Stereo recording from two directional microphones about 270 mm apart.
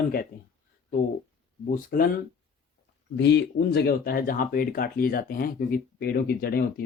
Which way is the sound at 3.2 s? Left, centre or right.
Left.